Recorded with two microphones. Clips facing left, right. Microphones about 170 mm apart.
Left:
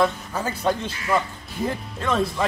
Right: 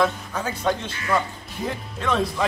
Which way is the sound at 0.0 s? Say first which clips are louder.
Left 1 dB; 5° left (ahead or behind).